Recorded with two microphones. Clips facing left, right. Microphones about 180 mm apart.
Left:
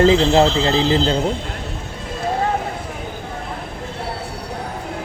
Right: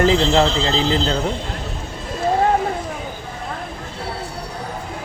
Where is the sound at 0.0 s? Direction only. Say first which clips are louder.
Left 3 dB; 25° left (ahead or behind).